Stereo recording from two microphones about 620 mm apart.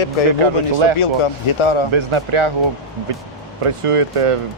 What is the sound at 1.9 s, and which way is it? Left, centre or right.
Speech, right.